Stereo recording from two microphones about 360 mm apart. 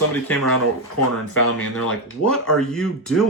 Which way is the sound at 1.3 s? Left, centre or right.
Left.